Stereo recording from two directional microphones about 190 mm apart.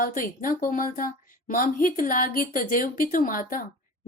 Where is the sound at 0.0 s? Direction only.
45° left (ahead or behind).